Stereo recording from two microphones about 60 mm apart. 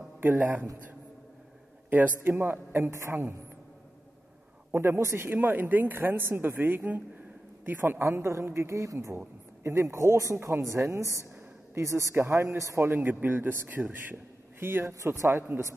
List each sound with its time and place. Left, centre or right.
0.2 s speech: right
1.9 s speech: right
4.7 s speech: right
8.0 s speech: right
9.6 s speech: right
10.3 s speech: right
10.6 s a woman's voice: right
12.3 s speech: right
12.5 s a woman's voice: right
12.8 s speech: right